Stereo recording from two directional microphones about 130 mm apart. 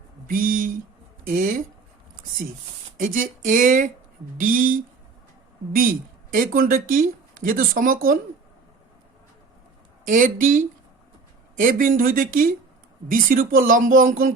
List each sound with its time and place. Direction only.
0.3 s speech: 90° right
3.0 s speech: 90° right
10.1 s speech: 90° right